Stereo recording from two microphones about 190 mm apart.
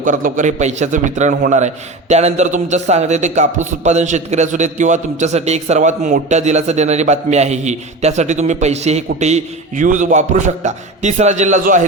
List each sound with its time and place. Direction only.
0.0 s a man's voice: 45° right (ahead or behind)